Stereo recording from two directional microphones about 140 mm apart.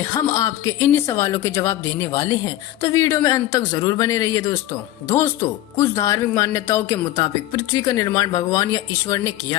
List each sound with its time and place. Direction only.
0.0 s speech: 25° left (ahead or behind)